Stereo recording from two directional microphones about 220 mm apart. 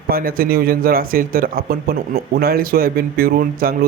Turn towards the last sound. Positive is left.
turn(degrees=-40)  # may be behind; listen again after turning